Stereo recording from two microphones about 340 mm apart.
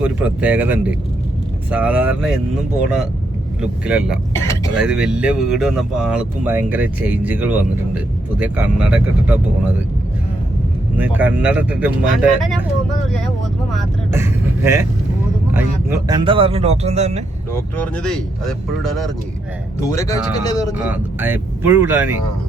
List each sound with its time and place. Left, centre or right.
0.0 s speech: centre
4.4 s a sound: centre
4.8 s speech: centre
10.9 s speech: centre
13.7 s speech: centre
17.5 s speech: centre
20.8 s speech: centre